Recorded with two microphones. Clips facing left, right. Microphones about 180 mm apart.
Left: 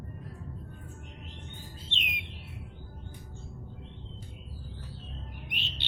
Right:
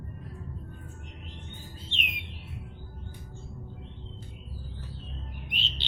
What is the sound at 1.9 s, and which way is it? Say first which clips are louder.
Bird: right 3 dB; 20° left (ahead or behind).